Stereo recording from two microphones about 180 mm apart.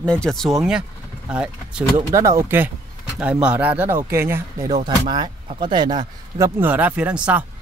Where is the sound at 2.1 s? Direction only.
15° right (ahead or behind).